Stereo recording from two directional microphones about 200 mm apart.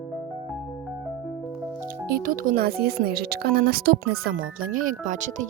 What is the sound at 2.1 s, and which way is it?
Speech, 45° right (ahead or behind).